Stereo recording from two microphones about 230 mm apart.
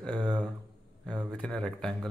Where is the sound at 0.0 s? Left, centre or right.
Centre.